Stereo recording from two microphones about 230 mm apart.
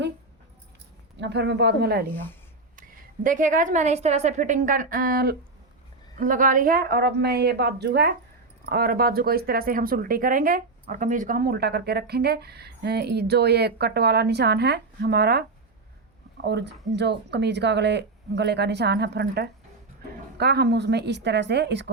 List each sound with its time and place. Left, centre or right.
1.1 s speech: right
3.2 s a woman's voice: right
16.5 s speech: right